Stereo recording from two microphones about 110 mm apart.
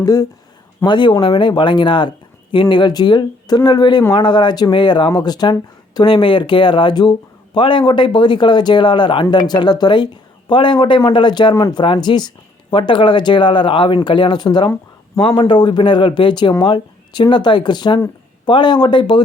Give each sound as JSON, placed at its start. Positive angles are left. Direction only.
{"t": 0.0, "sound": "speech", "side_deg": 35}
{"t": 0.9, "sound": "speech", "side_deg": 45}
{"t": 11.5, "sound": "speech", "side_deg": 30}
{"t": 11.8, "sound": "speech", "side_deg": 45}